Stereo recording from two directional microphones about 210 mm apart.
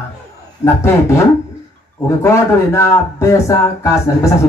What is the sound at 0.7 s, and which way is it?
A man's voice, 15° left (ahead or behind).